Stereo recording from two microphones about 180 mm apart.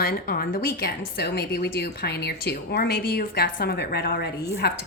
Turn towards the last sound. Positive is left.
turn(degrees=65)  # may be behind; listen again after turning